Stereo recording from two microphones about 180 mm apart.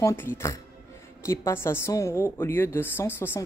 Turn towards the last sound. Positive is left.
turn(degrees=10)  # may be behind; listen again after turning